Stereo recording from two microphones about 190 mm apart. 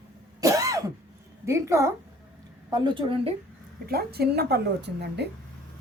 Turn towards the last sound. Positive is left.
turn(degrees=-60)  # may be behind; listen again after turning